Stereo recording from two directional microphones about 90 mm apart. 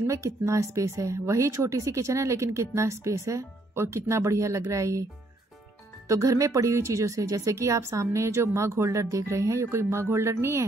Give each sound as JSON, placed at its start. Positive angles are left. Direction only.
{"t": 0.0, "sound": "speech", "side_deg": -35}
{"t": 6.0, "sound": "speech", "side_deg": -35}